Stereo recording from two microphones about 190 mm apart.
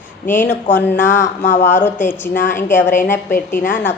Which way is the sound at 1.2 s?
40° left (ahead or behind).